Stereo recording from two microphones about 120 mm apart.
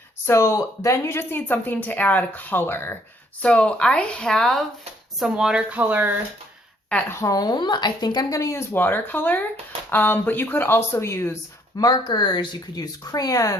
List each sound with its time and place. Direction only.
0.3 s a woman's voice: 20° left (ahead or behind); by 6.1 s 15° right (ahead or behind)
7.1 s a woman's voice: 25° left (ahead or behind)
11.8 s speech: 35° left (ahead or behind)